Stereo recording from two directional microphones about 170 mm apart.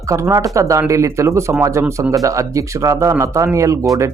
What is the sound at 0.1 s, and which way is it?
Speech, 20° right (ahead or behind).